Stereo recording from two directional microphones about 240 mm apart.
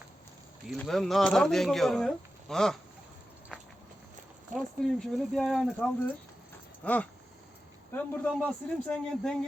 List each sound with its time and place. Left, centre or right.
0.7 s speech: centre
4.5 s speech: centre
6.8 s a sound: centre
7.9 s speech: centre